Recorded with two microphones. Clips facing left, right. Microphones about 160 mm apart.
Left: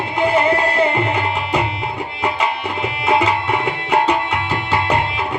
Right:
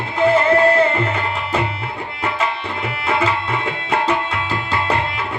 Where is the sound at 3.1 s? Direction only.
15° left (ahead or behind).